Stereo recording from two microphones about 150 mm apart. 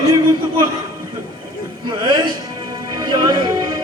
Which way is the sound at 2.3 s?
25° right (ahead or behind).